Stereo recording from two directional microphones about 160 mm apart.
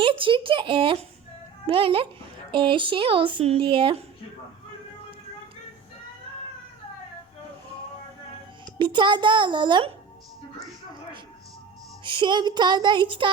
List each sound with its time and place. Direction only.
0.0 s speech: 35° right (ahead or behind)
8.6 s a child's voice: 30° right (ahead or behind)
12.0 s a child's voice: 30° right (ahead or behind)